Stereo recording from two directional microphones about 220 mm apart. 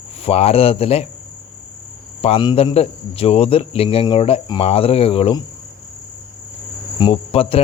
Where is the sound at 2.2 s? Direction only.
25° left (ahead or behind).